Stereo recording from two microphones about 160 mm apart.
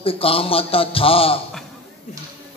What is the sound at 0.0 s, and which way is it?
A man's voice, 35° left (ahead or behind).